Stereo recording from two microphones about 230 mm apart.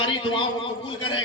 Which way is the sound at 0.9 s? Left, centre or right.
Left.